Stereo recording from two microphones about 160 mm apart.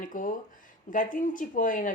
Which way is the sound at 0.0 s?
55° left (ahead or behind).